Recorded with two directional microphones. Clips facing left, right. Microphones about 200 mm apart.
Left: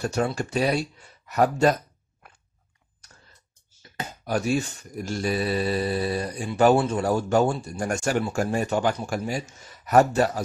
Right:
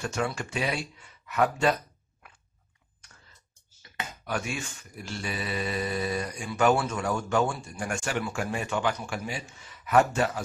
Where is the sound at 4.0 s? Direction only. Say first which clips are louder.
Left 6 dB; 35° left (ahead or behind).